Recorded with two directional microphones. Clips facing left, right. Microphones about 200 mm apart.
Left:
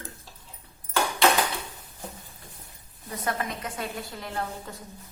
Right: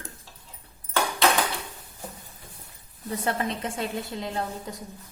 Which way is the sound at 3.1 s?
30° right (ahead or behind).